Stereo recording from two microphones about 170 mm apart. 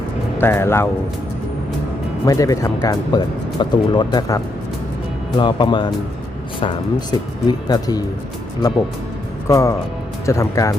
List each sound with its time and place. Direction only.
0.3 s speech: 15° left (ahead or behind)
2.2 s speech: 20° left (ahead or behind)
5.4 s speech: 25° left (ahead or behind)
9.5 s speech: 20° left (ahead or behind)